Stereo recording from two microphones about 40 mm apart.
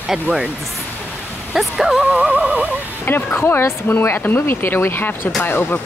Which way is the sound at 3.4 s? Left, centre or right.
Left.